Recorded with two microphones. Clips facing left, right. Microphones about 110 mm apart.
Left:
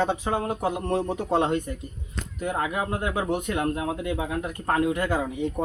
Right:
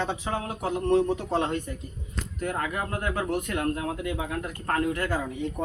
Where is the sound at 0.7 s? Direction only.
15° left (ahead or behind).